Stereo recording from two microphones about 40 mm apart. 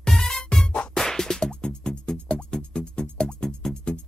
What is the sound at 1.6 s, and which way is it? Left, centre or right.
Music, left.